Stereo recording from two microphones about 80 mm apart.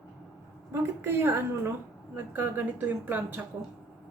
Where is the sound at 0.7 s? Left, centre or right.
Right.